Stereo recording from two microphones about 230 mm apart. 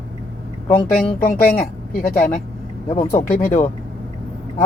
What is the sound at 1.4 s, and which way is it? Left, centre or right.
Speech, left.